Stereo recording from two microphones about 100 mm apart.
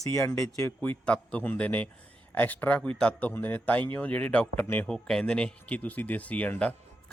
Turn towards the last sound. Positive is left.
turn(degrees=15)  # may be behind; listen again after turning